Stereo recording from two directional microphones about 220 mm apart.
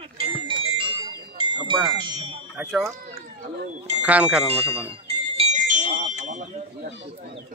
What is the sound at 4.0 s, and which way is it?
Speech, 5° right (ahead or behind).